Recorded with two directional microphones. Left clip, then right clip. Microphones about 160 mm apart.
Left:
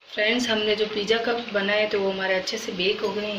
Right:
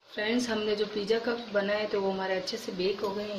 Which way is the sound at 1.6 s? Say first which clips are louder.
Left 6 dB; 40° right (ahead or behind).